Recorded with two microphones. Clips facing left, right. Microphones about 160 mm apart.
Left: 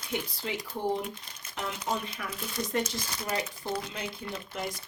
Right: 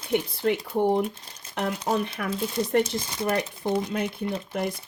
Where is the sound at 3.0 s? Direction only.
25° right (ahead or behind).